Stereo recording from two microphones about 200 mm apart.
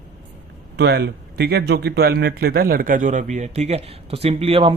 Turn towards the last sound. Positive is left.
turn(degrees=-25)  # may be behind; listen again after turning